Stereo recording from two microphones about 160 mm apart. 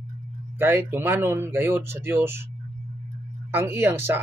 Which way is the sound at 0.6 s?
15° right (ahead or behind).